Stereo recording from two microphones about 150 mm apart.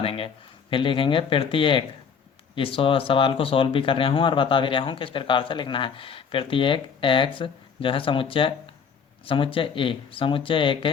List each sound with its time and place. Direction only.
0.0 s a man's voice: 40° left (ahead or behind)